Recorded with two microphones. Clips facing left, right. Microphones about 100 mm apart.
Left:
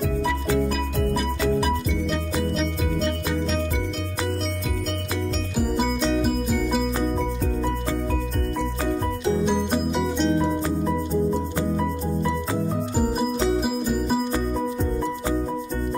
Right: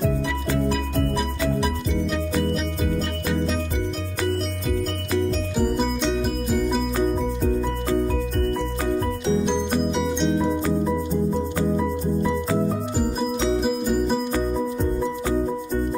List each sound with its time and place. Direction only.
5.6 s music: centre (ahead or behind)
10.0 s music: centre (ahead or behind)
13.6 s music: 5° left (ahead or behind)